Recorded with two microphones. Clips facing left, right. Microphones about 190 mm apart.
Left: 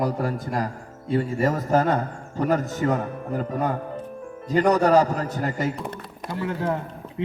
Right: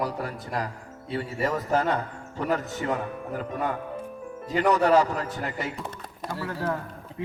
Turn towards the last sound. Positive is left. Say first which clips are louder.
# left 4 dB
turn(degrees=25)  # may be behind; listen again after turning